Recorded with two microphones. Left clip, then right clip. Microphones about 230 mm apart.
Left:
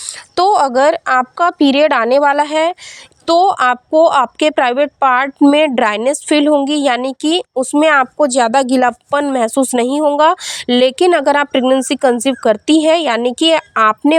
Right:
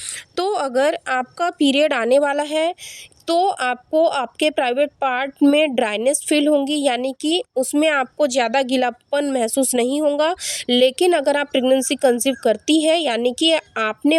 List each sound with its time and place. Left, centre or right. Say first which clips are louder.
0.3 s speech: left 9 dB; centre
8.3 s speech: left 6 dB; left